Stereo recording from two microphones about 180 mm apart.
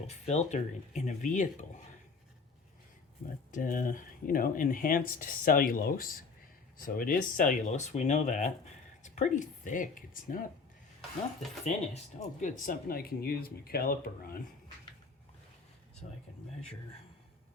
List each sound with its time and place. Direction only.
0.1 s speech: 35° left (ahead or behind)
3.5 s speech: 50° left (ahead or behind)
12.2 s speech: 45° left (ahead or behind)
16.0 s speech: 35° left (ahead or behind)